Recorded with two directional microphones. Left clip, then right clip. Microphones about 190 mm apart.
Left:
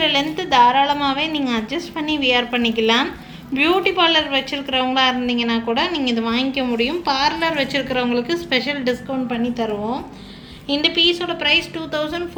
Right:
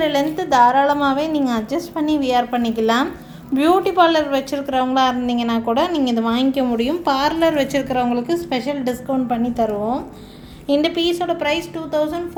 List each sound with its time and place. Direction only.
0.0 s a woman's voice: 45° right (ahead or behind)